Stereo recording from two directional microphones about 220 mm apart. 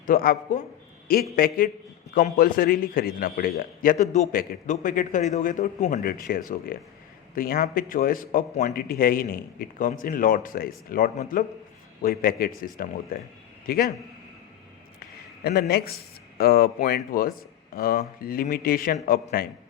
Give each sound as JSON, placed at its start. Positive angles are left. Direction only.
{"t": 0.0, "sound": "speech", "side_deg": 40}
{"t": 15.4, "sound": "speech", "side_deg": 45}